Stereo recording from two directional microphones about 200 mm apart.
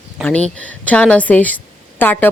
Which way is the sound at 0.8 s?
5° left (ahead or behind).